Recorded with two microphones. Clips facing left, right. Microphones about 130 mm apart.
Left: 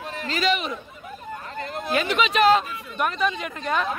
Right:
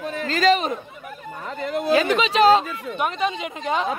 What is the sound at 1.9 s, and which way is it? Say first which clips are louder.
A woman's voice: right 2 dB; 35° right (ahead or behind).